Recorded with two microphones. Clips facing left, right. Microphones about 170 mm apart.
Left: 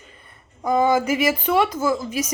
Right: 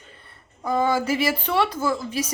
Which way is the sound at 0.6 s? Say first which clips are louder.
Left 3 dB; 15° left (ahead or behind).